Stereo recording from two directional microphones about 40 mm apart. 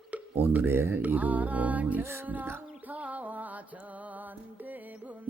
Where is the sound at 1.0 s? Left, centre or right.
Right.